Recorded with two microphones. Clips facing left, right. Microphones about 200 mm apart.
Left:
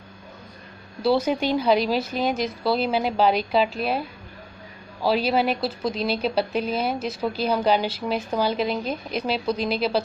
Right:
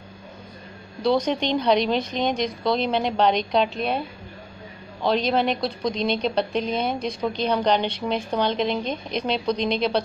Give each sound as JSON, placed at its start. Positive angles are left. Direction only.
{"t": 1.0, "sound": "a woman's voice", "side_deg": 5}
{"t": 5.0, "sound": "a woman's voice", "side_deg": 5}